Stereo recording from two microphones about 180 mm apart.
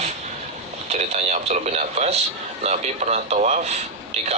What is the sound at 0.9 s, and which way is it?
Speech, 40° right (ahead or behind).